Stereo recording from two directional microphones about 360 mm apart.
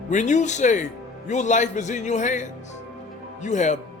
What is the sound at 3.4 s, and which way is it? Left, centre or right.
Speech, centre.